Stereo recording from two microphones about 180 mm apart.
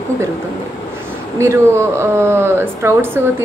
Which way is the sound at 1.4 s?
15° right (ahead or behind).